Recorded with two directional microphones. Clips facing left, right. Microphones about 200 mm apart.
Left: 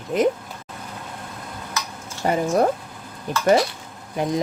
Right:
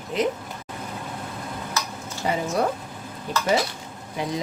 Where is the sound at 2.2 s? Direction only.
50° left (ahead or behind).